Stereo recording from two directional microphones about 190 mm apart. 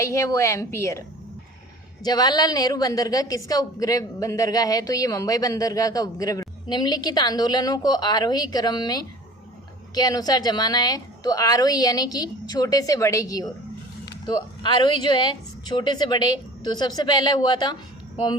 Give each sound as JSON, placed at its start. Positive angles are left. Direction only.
{"t": 0.0, "sound": "a woman's voice", "side_deg": 15}
{"t": 2.0, "sound": "a woman's voice", "side_deg": 20}